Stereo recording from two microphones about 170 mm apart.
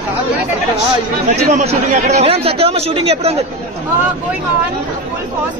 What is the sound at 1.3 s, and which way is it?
Speech, 50° right (ahead or behind).